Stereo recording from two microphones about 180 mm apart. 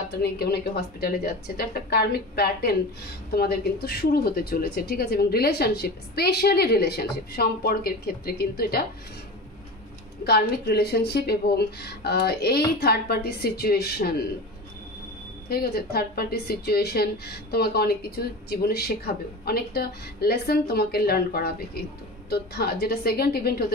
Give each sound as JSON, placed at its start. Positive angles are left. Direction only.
{"t": 0.1, "sound": "a woman's voice", "side_deg": 65}
{"t": 10.2, "sound": "a woman's voice", "side_deg": 60}
{"t": 15.4, "sound": "a woman's voice", "side_deg": 60}